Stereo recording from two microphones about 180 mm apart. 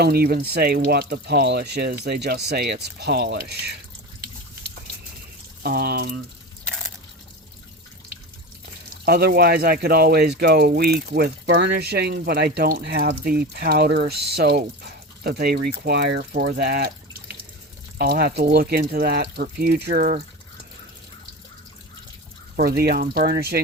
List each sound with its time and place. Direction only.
0.0 s speech: 60° right (ahead or behind)
5.6 s speech: 55° right (ahead or behind)
6.7 s a sound: centre (ahead or behind)
8.6 s speech: 60° right (ahead or behind)
17.9 s speech: 60° right (ahead or behind)
22.5 s speech: 60° right (ahead or behind)